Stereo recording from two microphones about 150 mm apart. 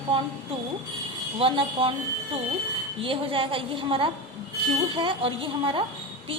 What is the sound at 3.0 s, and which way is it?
A woman's voice, 35° right (ahead or behind).